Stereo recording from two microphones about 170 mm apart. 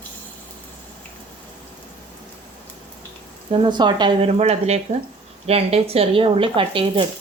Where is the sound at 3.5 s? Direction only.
25° right (ahead or behind).